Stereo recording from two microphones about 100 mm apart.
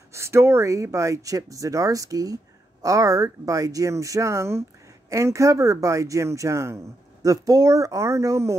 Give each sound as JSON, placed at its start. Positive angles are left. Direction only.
{"t": 0.1, "sound": "speech", "side_deg": -30}